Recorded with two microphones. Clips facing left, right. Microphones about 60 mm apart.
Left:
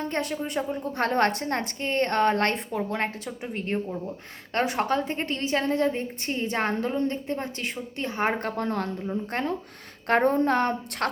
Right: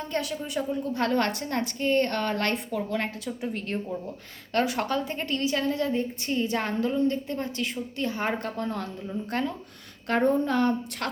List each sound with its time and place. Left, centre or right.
0.0 s a woman's voice: left